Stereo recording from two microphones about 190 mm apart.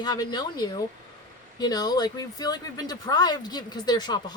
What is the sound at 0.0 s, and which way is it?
Speech, 20° left (ahead or behind).